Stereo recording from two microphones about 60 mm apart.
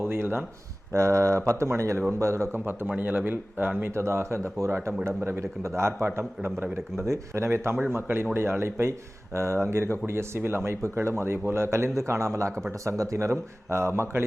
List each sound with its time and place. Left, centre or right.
0.0 s speech: right
0.9 s speech: right
2.6 s a man's voice: right
3.9 s a man's voice: right